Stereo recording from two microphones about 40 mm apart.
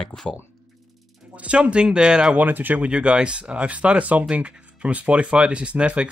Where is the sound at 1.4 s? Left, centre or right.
Right.